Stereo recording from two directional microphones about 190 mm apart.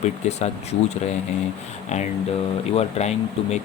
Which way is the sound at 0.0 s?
35° left (ahead or behind).